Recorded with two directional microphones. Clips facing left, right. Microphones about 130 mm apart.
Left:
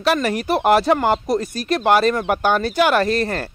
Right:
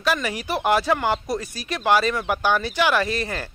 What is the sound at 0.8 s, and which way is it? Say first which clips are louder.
Speech: left 5 dB; 40° left (ahead or behind).